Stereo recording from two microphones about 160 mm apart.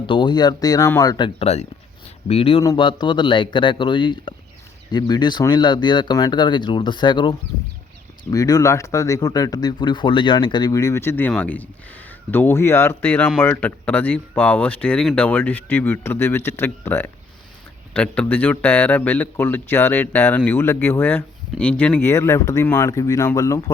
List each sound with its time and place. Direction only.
0.1 s speech: 30° left (ahead or behind)